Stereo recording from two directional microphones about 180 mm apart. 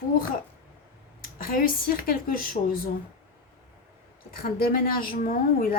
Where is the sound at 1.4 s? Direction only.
55° left (ahead or behind).